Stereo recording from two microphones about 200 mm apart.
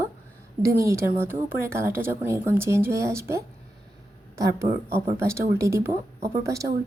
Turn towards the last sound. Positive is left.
turn(degrees=-15)  # may be behind; listen again after turning